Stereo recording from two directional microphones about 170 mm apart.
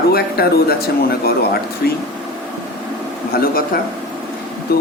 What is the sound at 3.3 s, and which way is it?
Speech, 60° left (ahead or behind).